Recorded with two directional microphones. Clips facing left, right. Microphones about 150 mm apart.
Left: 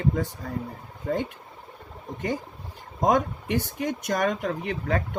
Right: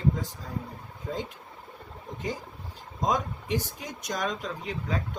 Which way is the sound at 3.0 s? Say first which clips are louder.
Left 6 dB; 60° left (ahead or behind).